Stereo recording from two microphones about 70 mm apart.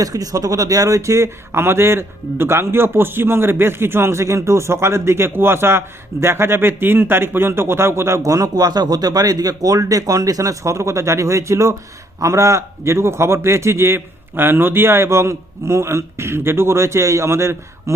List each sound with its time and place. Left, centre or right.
0.0 s speech: right